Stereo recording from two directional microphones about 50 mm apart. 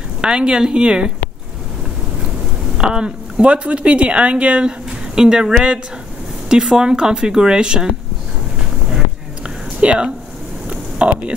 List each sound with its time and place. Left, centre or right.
0.2 s speech: centre
2.8 s speech: centre
6.5 s speech: centre
9.8 s speech: right
10.7 s a sound: right